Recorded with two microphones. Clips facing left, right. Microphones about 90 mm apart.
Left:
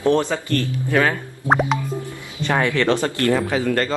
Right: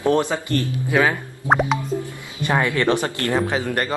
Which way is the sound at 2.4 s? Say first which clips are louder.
Left 1 dB; 15° right (ahead or behind).